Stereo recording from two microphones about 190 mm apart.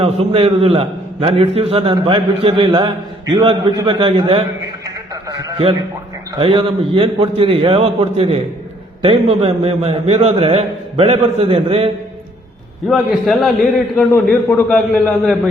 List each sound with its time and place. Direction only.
0.0 s a man's voice: 30° right (ahead or behind)
12.9 s a man's voice: centre (ahead or behind)